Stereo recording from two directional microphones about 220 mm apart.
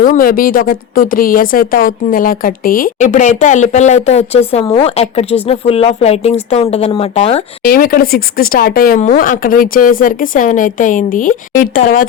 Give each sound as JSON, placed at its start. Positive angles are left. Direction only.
{"t": 0.0, "sound": "a woman's voice", "side_deg": 40}
{"t": 7.6, "sound": "a woman's voice", "side_deg": 45}